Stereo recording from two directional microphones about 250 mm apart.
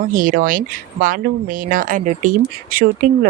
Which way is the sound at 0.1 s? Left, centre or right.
Right.